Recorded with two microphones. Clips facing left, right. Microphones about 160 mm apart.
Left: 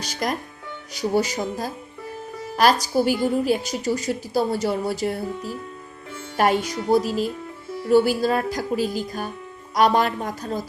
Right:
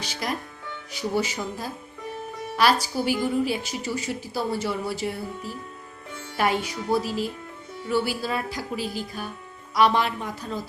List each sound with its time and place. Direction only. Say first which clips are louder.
0.0 s a woman's voice: left 4 dB; 45° left (ahead or behind)